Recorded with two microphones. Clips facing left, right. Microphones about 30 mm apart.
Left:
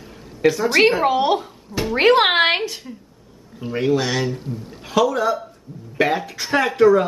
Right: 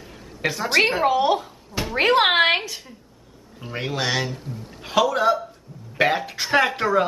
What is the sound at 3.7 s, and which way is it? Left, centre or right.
Speech, centre.